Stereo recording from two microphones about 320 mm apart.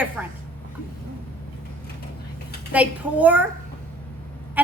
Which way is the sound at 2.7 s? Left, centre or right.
Centre.